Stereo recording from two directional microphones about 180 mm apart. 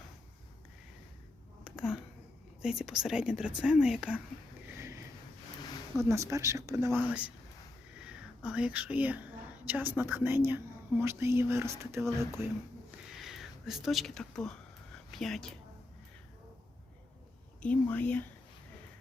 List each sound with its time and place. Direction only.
1.6 s a sound: 5° right (ahead or behind)
2.6 s speech: 5° right (ahead or behind)
6.0 s speech: 15° right (ahead or behind)
13.1 s speech: centre (ahead or behind)
17.6 s speech: 10° left (ahead or behind)